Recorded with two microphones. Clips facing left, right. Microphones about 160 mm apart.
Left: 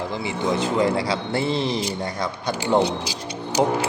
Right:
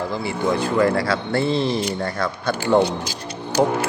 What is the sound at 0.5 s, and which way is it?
Speech, 20° left (ahead or behind).